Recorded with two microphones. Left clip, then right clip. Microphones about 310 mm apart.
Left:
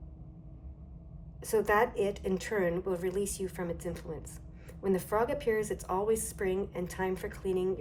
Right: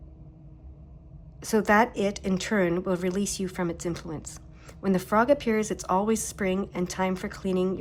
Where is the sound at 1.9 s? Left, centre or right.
Centre.